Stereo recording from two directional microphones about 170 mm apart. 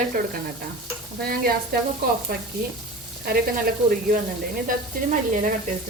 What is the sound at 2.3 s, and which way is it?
Speech, 60° right (ahead or behind).